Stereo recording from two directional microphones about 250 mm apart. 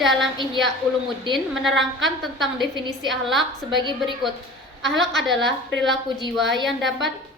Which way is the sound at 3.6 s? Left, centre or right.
Centre.